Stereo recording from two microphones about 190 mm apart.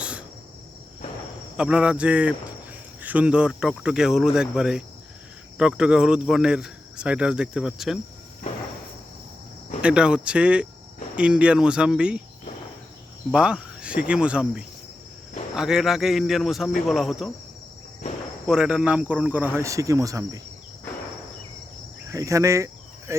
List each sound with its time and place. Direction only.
0.0 s cricket: 5° right (ahead or behind)
1.5 s speech: 5° right (ahead or behind)
9.8 s speech: 5° right (ahead or behind)
13.3 s speech: 5° right (ahead or behind)
18.4 s a man's voice: 5° right (ahead or behind)
22.1 s speech: 15° right (ahead or behind)